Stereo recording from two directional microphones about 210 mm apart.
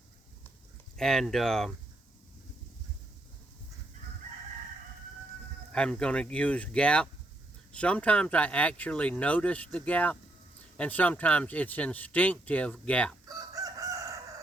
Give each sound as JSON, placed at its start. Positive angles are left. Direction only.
{"t": 0.9, "sound": "speech", "side_deg": 0}
{"t": 5.7, "sound": "speech", "side_deg": 5}
{"t": 13.2, "sound": "chicken", "side_deg": -15}